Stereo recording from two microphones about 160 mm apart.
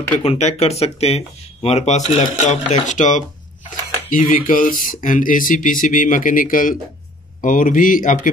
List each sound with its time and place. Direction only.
0.2 s speech: 40° left (ahead or behind); by 8.3 s 60° left (ahead or behind)